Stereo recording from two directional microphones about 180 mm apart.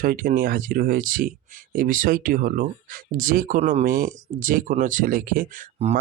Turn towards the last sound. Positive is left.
turn(degrees=-40)  # may be behind; listen again after turning